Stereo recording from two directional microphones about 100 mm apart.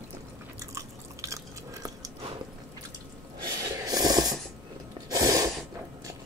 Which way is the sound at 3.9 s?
40° right (ahead or behind).